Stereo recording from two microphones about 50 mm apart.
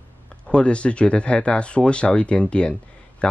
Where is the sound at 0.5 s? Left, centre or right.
Left.